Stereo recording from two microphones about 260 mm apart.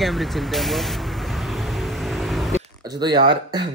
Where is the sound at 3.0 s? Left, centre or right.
Centre.